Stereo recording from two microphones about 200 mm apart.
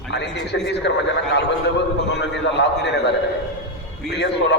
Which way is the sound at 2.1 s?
60° left (ahead or behind).